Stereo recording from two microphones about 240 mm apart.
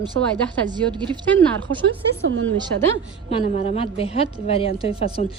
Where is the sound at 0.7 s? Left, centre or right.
Centre.